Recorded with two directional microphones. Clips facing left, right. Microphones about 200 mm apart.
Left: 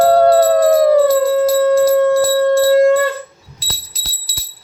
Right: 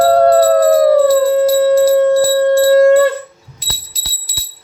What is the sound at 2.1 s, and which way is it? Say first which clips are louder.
Bell: right 2 dB; 15° right (ahead or behind).